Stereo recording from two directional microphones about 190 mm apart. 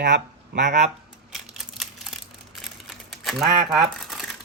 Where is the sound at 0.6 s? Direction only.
40° right (ahead or behind).